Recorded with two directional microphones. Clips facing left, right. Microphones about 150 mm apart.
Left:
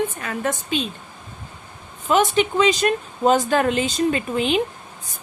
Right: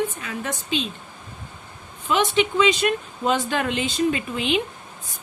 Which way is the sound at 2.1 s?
45° left (ahead or behind).